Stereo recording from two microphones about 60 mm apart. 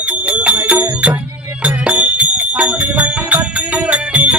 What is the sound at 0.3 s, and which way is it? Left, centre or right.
Music, right.